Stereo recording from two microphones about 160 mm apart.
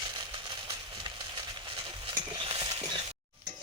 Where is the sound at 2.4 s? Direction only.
35° right (ahead or behind).